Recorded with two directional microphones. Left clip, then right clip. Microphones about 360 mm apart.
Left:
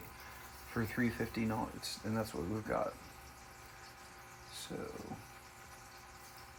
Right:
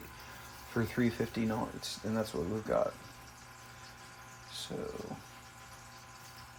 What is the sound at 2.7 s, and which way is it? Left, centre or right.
Speech, right.